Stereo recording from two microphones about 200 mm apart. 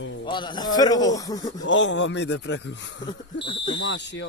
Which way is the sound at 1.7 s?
65° left (ahead or behind).